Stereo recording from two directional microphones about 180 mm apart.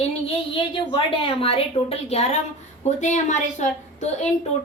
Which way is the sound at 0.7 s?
30° left (ahead or behind).